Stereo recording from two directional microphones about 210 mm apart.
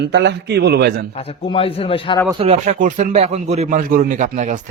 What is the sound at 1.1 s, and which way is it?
A man's voice, 30° left (ahead or behind).